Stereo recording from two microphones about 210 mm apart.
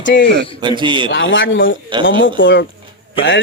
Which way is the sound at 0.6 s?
20° right (ahead or behind).